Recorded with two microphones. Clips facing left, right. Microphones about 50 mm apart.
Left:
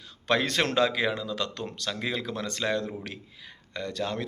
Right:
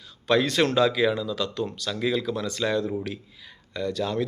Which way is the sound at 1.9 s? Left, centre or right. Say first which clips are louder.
Right 5 dB; left.